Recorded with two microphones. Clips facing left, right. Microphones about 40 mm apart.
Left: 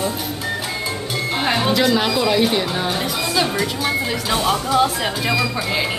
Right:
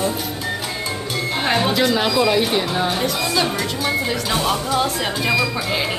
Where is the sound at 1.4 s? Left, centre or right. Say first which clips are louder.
Even; centre.